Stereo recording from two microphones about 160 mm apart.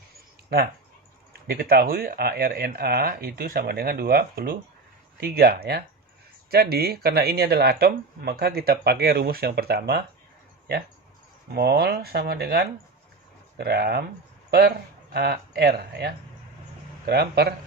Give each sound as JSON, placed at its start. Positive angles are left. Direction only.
{"t": 1.3, "sound": "speech", "side_deg": -70}
{"t": 11.5, "sound": "speech", "side_deg": -80}
{"t": 15.1, "sound": "speech", "side_deg": -85}